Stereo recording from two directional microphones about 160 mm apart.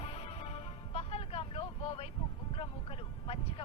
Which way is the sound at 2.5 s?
35° left (ahead or behind).